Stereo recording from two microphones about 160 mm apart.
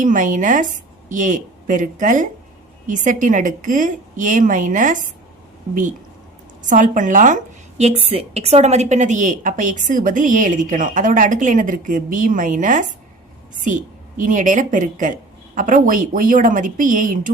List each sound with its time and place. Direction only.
0.0 s a woman's voice: 55° right (ahead or behind)
6.7 s a woman's voice: 50° right (ahead or behind)
7.8 s a woman's voice: 40° right (ahead or behind)